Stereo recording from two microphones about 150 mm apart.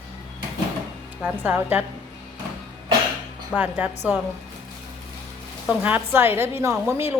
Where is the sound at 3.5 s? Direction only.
10° right (ahead or behind).